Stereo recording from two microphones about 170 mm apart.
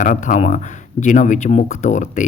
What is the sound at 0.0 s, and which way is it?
Speech, 50° left (ahead or behind).